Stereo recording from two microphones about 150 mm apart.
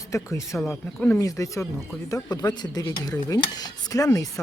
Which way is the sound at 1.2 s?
20° left (ahead or behind).